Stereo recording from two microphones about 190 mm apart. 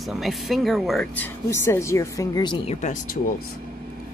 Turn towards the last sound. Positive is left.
turn(degrees=40)  # may be behind; listen again after turning